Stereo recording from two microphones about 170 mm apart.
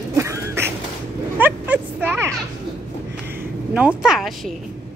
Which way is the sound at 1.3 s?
10° right (ahead or behind).